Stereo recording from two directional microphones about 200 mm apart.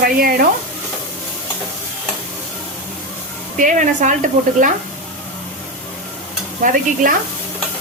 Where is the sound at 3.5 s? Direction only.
40° right (ahead or behind).